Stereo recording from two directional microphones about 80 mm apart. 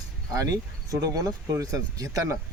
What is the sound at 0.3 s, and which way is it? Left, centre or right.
Speech, right.